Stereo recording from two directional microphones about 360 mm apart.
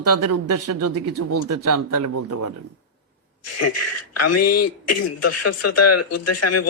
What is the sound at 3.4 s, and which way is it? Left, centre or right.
Speech, left.